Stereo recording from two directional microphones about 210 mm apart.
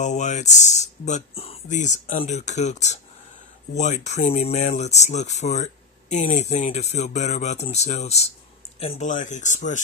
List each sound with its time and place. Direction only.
0.0 s speech: 35° left (ahead or behind)